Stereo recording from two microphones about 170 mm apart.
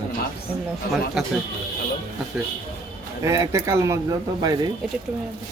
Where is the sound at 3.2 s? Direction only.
20° right (ahead or behind).